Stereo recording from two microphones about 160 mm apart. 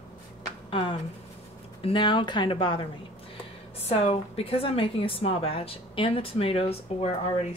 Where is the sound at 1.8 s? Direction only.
30° left (ahead or behind).